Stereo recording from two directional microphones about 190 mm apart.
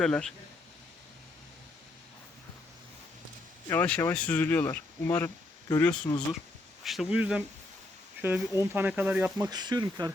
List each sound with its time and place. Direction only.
0.0 s speech: 5° left (ahead or behind)
3.7 s speech: 10° left (ahead or behind)
6.0 s speech: 25° left (ahead or behind)
6.8 s speech: centre (ahead or behind)
9.5 s speech: 20° right (ahead or behind)